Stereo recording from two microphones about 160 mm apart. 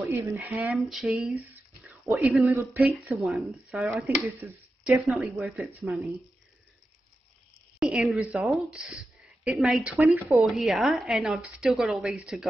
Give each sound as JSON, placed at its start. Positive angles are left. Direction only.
{"t": 0.0, "sound": "speech", "side_deg": -15}
{"t": 2.4, "sound": "a woman's voice", "side_deg": -15}
{"t": 7.8, "sound": "a woman's voice", "side_deg": -5}
{"t": 10.0, "sound": "speech", "side_deg": -20}
{"t": 10.4, "sound": "a woman's voice", "side_deg": 0}